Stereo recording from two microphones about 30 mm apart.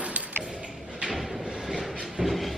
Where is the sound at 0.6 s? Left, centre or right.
Right.